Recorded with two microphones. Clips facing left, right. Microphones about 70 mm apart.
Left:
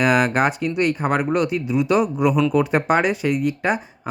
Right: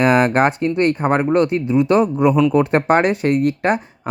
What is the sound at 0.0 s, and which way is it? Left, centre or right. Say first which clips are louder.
Speech: right 3 dB; right.